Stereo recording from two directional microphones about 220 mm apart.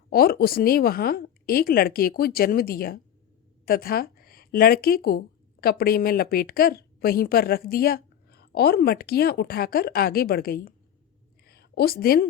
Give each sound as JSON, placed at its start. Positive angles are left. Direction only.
{"t": 0.1, "sound": "a woman's voice", "side_deg": 45}